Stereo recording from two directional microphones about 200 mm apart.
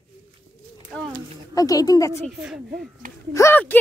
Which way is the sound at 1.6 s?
20° left (ahead or behind).